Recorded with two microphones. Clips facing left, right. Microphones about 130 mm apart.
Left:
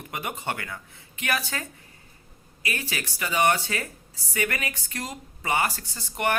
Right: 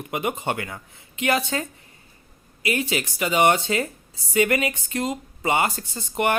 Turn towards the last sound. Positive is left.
turn(degrees=-20)  # may be behind; listen again after turning